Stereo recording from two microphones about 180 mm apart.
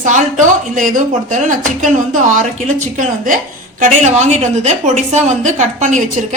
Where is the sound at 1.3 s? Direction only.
45° right (ahead or behind).